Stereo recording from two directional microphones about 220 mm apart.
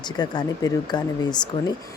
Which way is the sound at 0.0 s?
20° left (ahead or behind).